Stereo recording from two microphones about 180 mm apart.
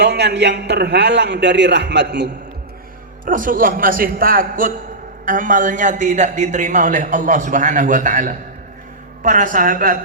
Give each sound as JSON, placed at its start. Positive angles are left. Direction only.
{"t": 0.0, "sound": "a man's voice", "side_deg": -65}
{"t": 3.2, "sound": "a man's voice", "side_deg": -50}